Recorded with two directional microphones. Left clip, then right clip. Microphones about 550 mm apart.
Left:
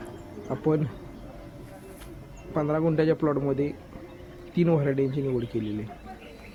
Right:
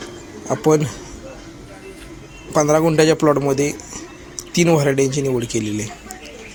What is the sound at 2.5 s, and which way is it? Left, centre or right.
Speech, left.